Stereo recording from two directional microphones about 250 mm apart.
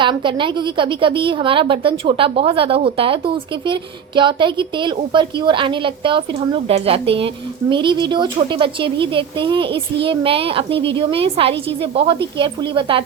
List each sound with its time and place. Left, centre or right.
0.0 s a woman's voice: centre